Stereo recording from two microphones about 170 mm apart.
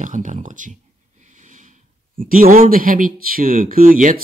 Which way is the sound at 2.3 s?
55° right (ahead or behind).